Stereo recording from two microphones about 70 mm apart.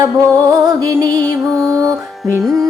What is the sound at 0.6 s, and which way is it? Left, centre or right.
Music, right.